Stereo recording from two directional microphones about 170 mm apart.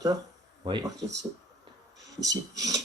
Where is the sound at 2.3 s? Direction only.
20° right (ahead or behind).